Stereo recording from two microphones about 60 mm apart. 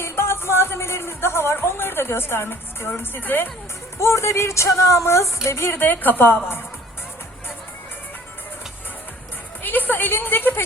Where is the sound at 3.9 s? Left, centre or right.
Left.